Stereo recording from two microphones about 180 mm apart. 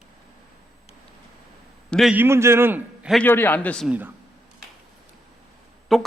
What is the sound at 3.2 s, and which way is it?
Speech, 10° left (ahead or behind).